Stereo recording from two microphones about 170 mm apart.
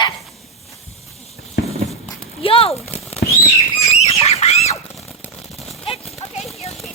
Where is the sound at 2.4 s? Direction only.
35° left (ahead or behind).